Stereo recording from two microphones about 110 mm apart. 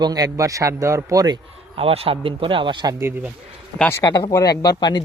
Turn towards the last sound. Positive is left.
turn(degrees=40)  # may be behind; listen again after turning